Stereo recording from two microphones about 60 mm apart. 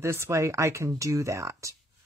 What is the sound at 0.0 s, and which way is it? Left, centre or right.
Speech, right.